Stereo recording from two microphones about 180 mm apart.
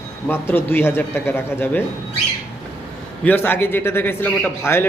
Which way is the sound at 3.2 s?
10° left (ahead or behind).